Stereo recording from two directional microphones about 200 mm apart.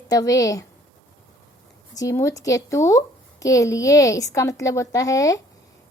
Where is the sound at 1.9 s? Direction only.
15° left (ahead or behind).